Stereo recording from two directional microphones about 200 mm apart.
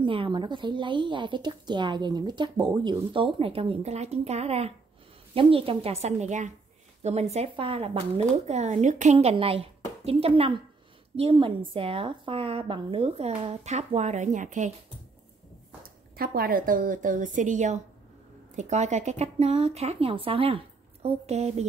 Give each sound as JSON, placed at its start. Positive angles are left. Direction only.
{"t": 0.0, "sound": "speech", "side_deg": -25}
{"t": 15.8, "sound": "speech", "side_deg": -45}